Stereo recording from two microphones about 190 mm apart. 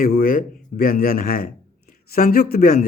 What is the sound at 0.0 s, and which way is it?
A man's voice, 45° left (ahead or behind).